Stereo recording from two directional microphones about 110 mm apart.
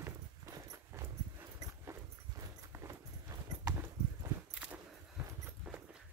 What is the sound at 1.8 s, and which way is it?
Horse, 25° right (ahead or behind).